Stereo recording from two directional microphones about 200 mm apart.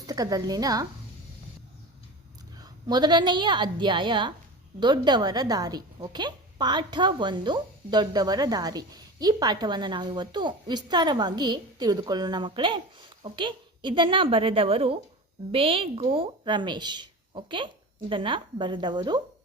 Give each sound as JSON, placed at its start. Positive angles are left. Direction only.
{"t": 0.1, "sound": "a woman's voice", "side_deg": -20}
{"t": 2.6, "sound": "a woman's voice", "side_deg": -20}